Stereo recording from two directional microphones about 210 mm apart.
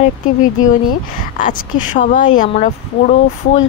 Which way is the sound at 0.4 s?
40° left (ahead or behind).